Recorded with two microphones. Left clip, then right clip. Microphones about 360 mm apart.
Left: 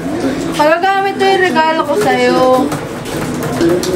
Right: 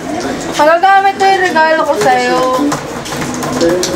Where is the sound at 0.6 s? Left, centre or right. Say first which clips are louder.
Right 2 dB; centre.